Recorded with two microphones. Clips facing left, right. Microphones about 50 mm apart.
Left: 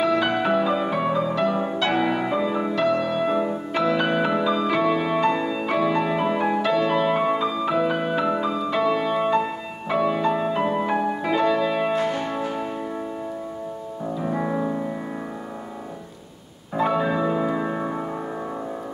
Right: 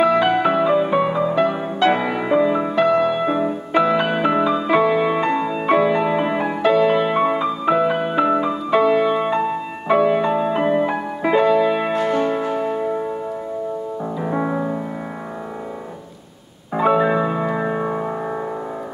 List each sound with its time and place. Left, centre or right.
0.0 s music: right
14.1 s music: centre
16.7 s music: right